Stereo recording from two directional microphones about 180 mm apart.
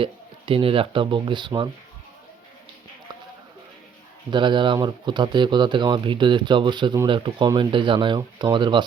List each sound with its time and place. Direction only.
0.0 s speech: 30° right (ahead or behind)
4.3 s speech: 25° right (ahead or behind)